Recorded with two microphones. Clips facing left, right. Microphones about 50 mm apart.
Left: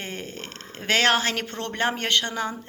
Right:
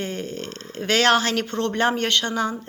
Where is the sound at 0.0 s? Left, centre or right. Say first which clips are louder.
Right 5 dB; centre.